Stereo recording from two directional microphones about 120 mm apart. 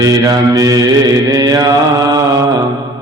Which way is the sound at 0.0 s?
30° right (ahead or behind).